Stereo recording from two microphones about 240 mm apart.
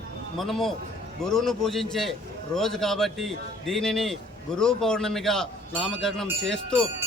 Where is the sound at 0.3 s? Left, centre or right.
Centre.